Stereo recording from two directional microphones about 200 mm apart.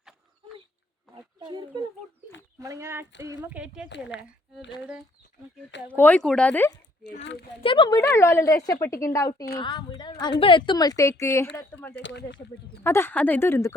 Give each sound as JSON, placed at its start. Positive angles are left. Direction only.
{"t": 1.4, "sound": "speech", "side_deg": -20}
{"t": 3.8, "sound": "speech", "side_deg": 60}
{"t": 5.9, "sound": "a woman's voice", "side_deg": 10}
{"t": 7.6, "sound": "a woman's voice", "side_deg": 25}
{"t": 11.9, "sound": "speech", "side_deg": 60}
{"t": 12.8, "sound": "a woman's voice", "side_deg": 10}